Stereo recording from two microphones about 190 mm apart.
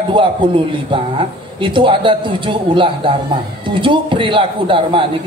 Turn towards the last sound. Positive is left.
turn(degrees=-25)  # may be behind; listen again after turning